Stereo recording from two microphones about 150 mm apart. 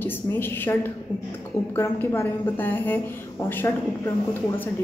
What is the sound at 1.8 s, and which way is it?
A woman's voice, 15° left (ahead or behind).